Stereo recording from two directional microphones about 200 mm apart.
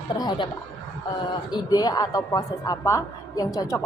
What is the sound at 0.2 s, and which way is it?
A woman's voice, 20° left (ahead or behind).